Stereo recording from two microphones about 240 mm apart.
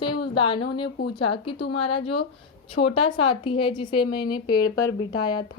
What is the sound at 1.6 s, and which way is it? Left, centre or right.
Speech, left.